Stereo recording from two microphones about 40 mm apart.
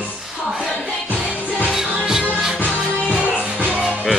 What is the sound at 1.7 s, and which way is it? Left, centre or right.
Music, centre.